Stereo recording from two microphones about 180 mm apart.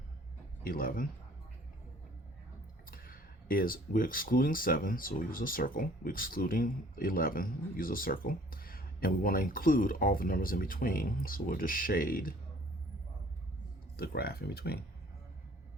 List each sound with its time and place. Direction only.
0.6 s speech: 50° left (ahead or behind)
2.9 s speech: 55° left (ahead or behind)
13.9 s speech: 60° left (ahead or behind)